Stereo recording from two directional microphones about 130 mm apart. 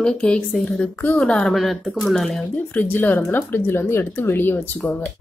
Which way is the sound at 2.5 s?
15° left (ahead or behind).